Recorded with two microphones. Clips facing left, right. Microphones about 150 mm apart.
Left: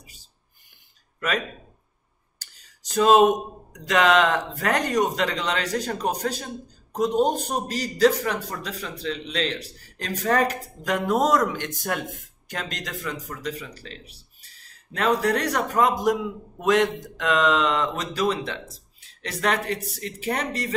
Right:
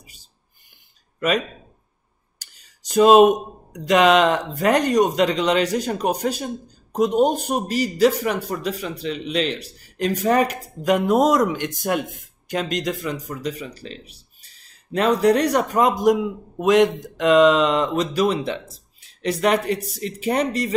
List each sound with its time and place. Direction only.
2.9 s a man's voice: 15° right (ahead or behind)